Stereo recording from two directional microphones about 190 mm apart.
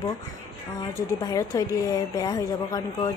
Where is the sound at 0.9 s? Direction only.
20° left (ahead or behind).